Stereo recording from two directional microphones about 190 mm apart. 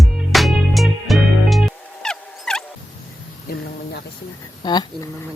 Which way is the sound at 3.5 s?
55° left (ahead or behind).